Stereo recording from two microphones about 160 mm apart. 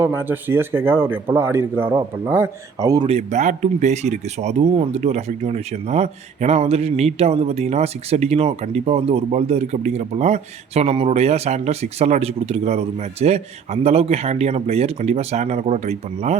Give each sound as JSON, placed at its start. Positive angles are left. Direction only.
{"t": 0.0, "sound": "speech", "side_deg": -15}
{"t": 3.1, "sound": "speech", "side_deg": -45}